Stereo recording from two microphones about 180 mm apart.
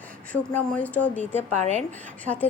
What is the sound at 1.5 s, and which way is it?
Speech, 40° right (ahead or behind).